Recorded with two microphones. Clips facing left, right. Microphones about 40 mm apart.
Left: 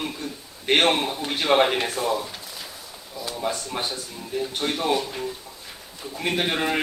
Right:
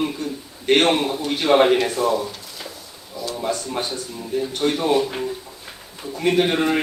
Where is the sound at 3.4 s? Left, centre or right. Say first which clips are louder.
Right 3 dB; centre.